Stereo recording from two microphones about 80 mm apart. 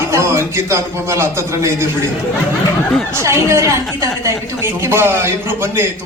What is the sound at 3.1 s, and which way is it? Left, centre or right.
A man's voice, right.